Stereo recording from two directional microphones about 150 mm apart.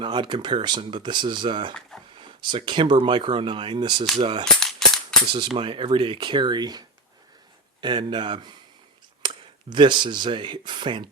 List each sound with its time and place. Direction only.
0.0 s speech: 30° right (ahead or behind)
4.4 s cap gun: 5° left (ahead or behind)
5.5 s speech: 35° right (ahead or behind)